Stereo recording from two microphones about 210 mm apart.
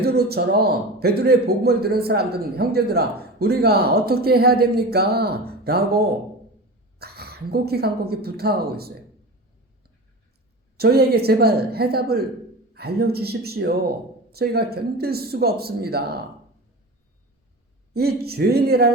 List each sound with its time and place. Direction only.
0.0 s a man's voice: 50° right (ahead or behind)
7.0 s a man's voice: 50° right (ahead or behind)
10.8 s a man's voice: 50° right (ahead or behind)
17.9 s a man's voice: 50° right (ahead or behind)